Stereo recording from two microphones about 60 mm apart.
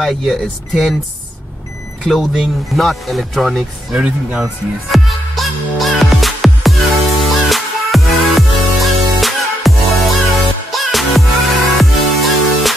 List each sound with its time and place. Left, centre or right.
0.0 s speech: centre
2.0 s speech: centre
3.9 s speech: centre
4.9 s music: centre